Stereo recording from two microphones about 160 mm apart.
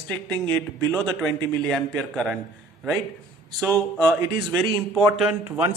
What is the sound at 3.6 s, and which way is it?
Speech, 10° left (ahead or behind).